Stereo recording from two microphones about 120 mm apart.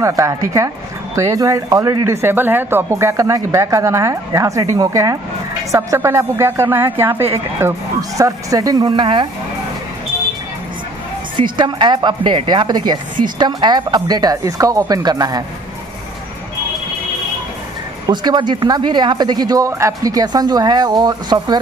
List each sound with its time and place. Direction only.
0.0 s speech: 25° right (ahead or behind)
8.8 s speech: 45° right (ahead or behind)
11.3 s speech: 45° right (ahead or behind)
18.0 s speech: 35° right (ahead or behind)